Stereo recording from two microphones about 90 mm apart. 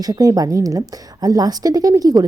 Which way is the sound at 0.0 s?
45° right (ahead or behind).